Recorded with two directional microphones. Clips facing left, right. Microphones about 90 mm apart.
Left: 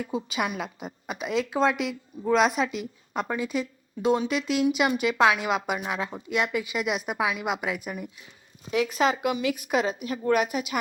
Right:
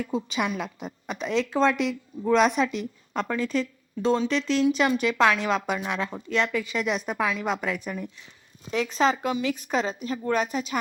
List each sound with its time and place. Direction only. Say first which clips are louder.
0.0 s a woman's voice: right 1 dB; 5° left (ahead or behind)
8.7 s speech: even; 35° right (ahead or behind)
9.5 s a woman's voice: left 1 dB; 10° left (ahead or behind)
10.0 s speech: left 2 dB; 30° right (ahead or behind)
10.4 s a woman's voice: even; 10° left (ahead or behind)